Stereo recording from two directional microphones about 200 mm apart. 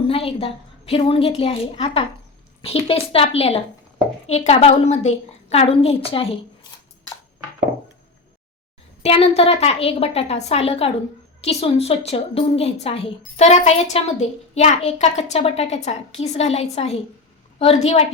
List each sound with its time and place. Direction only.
0.1 s a woman's voice: 30° left (ahead or behind)
9.0 s a woman's voice: 30° left (ahead or behind)